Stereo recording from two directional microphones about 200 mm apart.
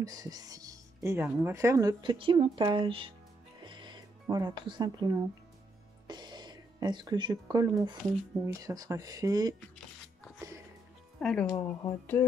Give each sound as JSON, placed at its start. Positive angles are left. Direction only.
{"t": 0.0, "sound": "speech", "side_deg": -20}
{"t": 3.6, "sound": "music", "side_deg": -25}
{"t": 6.0, "sound": "a sound", "side_deg": -20}
{"t": 8.5, "sound": "speech", "side_deg": -15}
{"t": 11.1, "sound": "speech", "side_deg": 5}
{"t": 11.5, "sound": "speech", "side_deg": 15}